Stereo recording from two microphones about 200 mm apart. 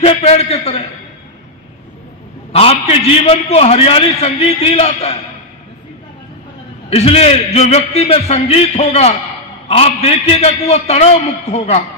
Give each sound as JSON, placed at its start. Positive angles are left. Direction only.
{"t": 0.0, "sound": "a man's voice", "side_deg": 30}
{"t": 2.5, "sound": "a man's voice", "side_deg": 30}
{"t": 6.9, "sound": "a man's voice", "side_deg": 30}